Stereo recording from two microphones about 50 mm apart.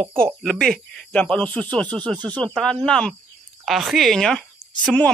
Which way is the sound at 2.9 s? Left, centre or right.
Centre.